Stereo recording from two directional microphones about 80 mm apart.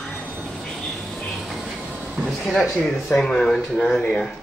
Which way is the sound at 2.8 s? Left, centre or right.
Centre.